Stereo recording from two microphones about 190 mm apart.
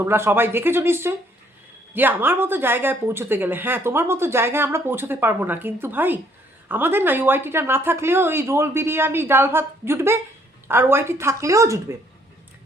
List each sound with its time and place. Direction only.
0.0 s speech: 10° right (ahead or behind)